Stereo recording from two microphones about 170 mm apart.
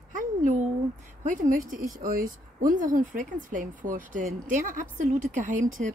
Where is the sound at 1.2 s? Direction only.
50° right (ahead or behind).